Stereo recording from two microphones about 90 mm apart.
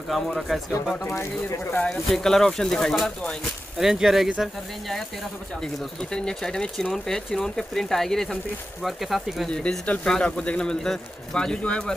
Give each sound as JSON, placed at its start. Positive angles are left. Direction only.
{"t": 0.1, "sound": "speech", "side_deg": 0}
{"t": 1.8, "sound": "speech", "side_deg": 10}
{"t": 3.8, "sound": "speech", "side_deg": -5}
{"t": 5.6, "sound": "speech", "side_deg": 5}
{"t": 9.5, "sound": "speech", "side_deg": 10}